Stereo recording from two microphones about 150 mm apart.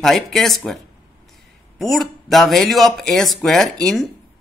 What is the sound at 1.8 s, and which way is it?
Speech, centre (ahead or behind).